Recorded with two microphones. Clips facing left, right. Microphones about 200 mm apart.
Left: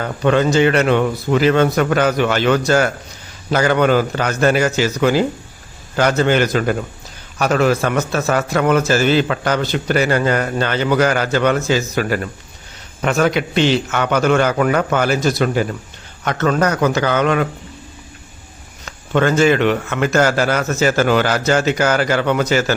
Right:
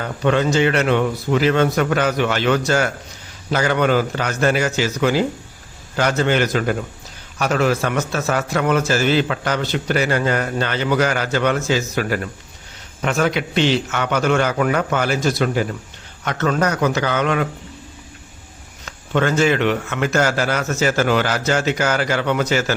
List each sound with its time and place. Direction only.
0.0 s a man's voice: 55° left (ahead or behind)
18.9 s a man's voice: 50° left (ahead or behind)